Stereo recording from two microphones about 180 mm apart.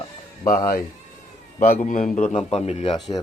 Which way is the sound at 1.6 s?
45° left (ahead or behind).